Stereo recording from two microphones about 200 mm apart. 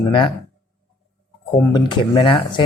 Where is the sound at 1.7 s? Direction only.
20° left (ahead or behind).